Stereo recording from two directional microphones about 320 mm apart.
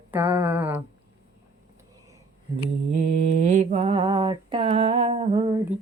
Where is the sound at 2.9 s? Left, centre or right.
Right.